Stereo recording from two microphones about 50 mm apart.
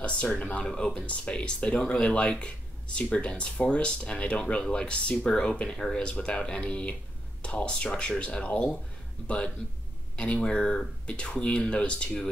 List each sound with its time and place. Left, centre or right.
0.4 s speech: left
10.1 s speech: left